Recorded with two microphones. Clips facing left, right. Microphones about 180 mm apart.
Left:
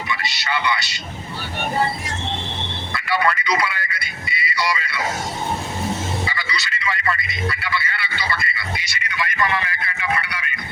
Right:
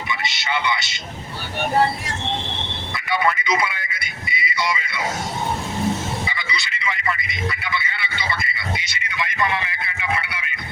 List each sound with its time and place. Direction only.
0.1 s speech: 20° right (ahead or behind)
2.9 s speech: 20° right (ahead or behind)
6.2 s speech: 20° right (ahead or behind)